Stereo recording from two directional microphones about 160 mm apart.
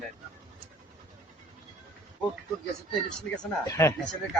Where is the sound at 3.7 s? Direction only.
15° left (ahead or behind).